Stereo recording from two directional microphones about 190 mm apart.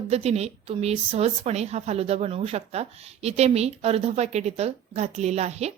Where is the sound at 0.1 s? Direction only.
35° right (ahead or behind).